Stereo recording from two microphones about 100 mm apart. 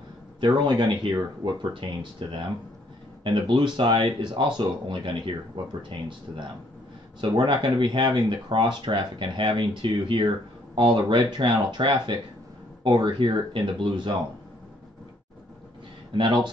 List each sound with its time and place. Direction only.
0.4 s speech: 50° right (ahead or behind)
16.2 s speech: 50° right (ahead or behind)